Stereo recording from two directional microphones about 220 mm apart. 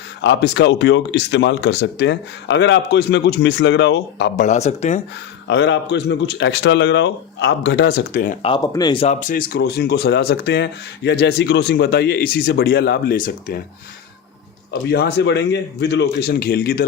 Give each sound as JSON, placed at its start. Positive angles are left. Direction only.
{"t": 0.2, "sound": "speech", "side_deg": 55}
{"t": 4.4, "sound": "speech", "side_deg": 30}
{"t": 5.5, "sound": "speech", "side_deg": 55}
{"t": 8.4, "sound": "speech", "side_deg": 20}
{"t": 14.7, "sound": "speech", "side_deg": 50}